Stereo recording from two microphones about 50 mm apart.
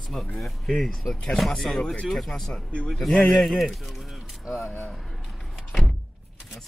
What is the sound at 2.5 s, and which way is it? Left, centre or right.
Speech, left.